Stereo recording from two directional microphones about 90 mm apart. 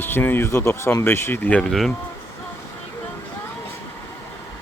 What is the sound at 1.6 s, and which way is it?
Speech, 5° left (ahead or behind).